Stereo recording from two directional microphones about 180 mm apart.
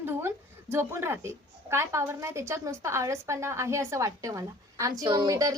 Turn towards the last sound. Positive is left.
turn(degrees=-20)  # may be behind; listen again after turning